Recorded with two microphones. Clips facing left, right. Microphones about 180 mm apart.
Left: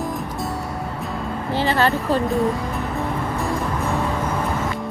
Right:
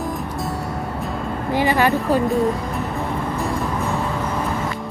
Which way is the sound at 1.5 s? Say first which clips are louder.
Right 2 dB; 15° right (ahead or behind).